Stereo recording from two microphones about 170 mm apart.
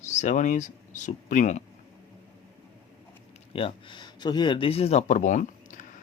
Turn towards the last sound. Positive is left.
turn(degrees=50)  # may be behind; listen again after turning